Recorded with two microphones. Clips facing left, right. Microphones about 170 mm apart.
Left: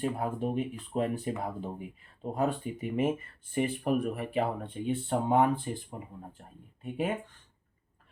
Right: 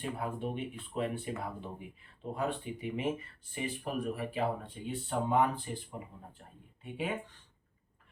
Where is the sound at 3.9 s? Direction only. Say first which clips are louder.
Left 6 dB; 60° left (ahead or behind).